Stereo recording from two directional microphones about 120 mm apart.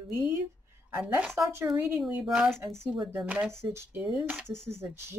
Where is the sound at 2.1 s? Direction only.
10° right (ahead or behind).